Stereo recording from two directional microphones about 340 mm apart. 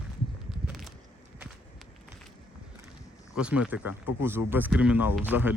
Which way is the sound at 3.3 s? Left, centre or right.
Centre.